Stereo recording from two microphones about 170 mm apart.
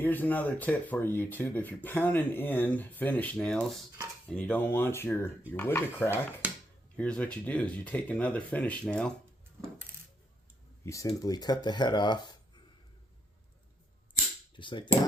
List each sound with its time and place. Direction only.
0.0 s speech: 10° left (ahead or behind)
6.4 s a sound: 10° right (ahead or behind)
6.9 s speech: 5° left (ahead or behind)
10.8 s speech: 20° left (ahead or behind)
14.5 s speech: 30° left (ahead or behind)